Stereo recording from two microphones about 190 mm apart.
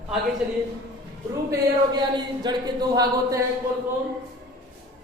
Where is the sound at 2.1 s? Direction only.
20° right (ahead or behind).